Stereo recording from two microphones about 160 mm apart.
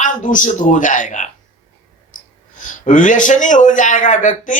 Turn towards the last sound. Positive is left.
turn(degrees=55)  # may be behind; listen again after turning